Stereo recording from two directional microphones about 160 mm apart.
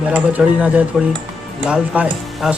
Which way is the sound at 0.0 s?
10° right (ahead or behind).